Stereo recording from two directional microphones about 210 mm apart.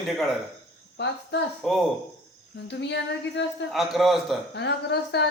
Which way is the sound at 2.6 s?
55° left (ahead or behind).